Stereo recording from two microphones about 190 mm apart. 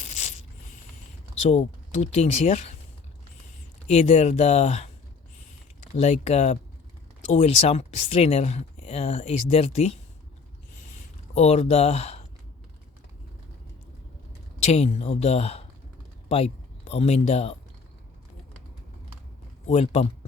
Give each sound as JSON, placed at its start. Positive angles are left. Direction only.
{"t": 0.0, "sound": "zipper", "side_deg": 35}
{"t": 1.5, "sound": "speech", "side_deg": 35}
{"t": 3.8, "sound": "speech", "side_deg": 35}
{"t": 6.0, "sound": "speech", "side_deg": 35}
{"t": 11.3, "sound": "speech", "side_deg": 35}
{"t": 14.6, "sound": "speech", "side_deg": 35}
{"t": 19.6, "sound": "speech", "side_deg": 35}